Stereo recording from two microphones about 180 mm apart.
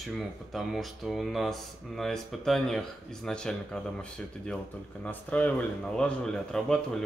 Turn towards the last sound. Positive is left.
turn(degrees=5)  # may be behind; listen again after turning